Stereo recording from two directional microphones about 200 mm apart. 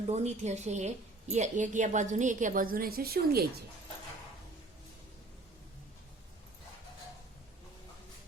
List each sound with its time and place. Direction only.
0.1 s a woman's voice: 35° right (ahead or behind); by 3.4 s 50° right (ahead or behind)